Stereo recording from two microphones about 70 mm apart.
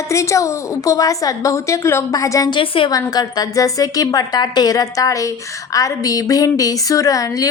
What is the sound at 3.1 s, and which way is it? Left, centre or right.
A woman's voice, left.